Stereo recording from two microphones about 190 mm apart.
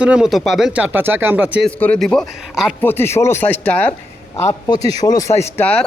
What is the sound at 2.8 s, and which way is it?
Speech, 10° left (ahead or behind).